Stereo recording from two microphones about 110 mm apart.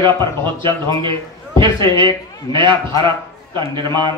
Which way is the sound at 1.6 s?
45° right (ahead or behind).